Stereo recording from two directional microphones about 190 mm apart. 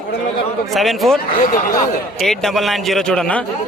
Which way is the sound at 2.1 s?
Centre (ahead or behind).